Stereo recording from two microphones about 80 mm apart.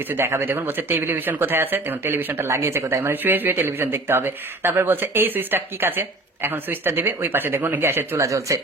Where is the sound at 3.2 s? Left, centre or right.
Right.